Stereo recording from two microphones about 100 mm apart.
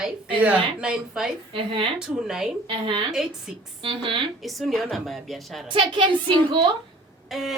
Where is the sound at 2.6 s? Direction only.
60° right (ahead or behind).